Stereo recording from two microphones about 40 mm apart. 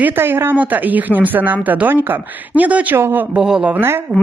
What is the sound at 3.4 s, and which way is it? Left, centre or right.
Speech, centre.